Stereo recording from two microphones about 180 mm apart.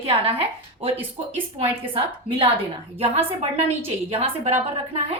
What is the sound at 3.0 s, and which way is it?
A woman's voice, 35° right (ahead or behind).